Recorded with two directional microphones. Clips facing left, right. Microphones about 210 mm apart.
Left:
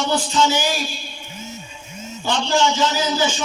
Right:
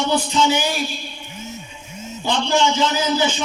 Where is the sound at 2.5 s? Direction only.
20° right (ahead or behind).